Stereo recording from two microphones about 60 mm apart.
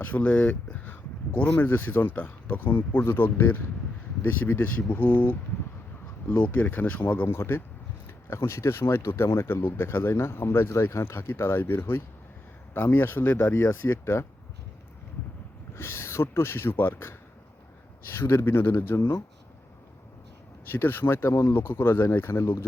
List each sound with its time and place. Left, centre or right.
0.0 s speech: left
6.4 s speech: left
15.7 s speech: left
20.7 s speech: left